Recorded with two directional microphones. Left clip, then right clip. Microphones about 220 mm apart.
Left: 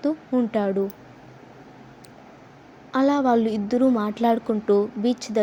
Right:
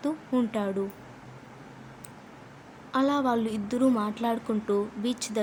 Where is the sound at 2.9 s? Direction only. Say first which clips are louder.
Left 6 dB; 15° left (ahead or behind).